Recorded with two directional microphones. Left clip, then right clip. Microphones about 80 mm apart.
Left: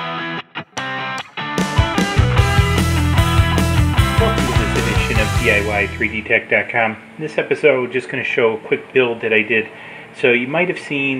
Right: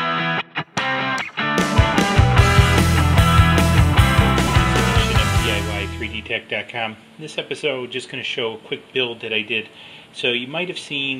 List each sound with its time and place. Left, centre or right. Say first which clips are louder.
0.7 s music: right 2 dB; centre
6.2 s speech: left 10 dB; right